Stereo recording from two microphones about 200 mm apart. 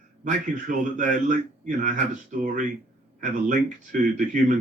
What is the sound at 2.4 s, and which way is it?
Speech, 40° right (ahead or behind).